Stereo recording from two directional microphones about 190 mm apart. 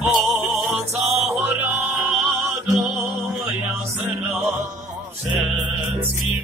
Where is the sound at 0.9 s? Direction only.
35° right (ahead or behind).